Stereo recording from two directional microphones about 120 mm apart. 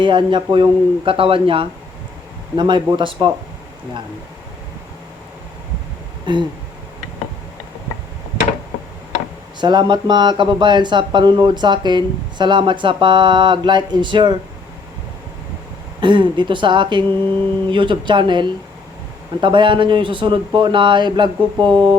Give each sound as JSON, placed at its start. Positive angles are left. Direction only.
{"t": 0.0, "sound": "speech", "side_deg": -45}
{"t": 6.2, "sound": "a sound", "side_deg": -40}
{"t": 9.6, "sound": "speech", "side_deg": -40}
{"t": 16.0, "sound": "speech", "side_deg": -40}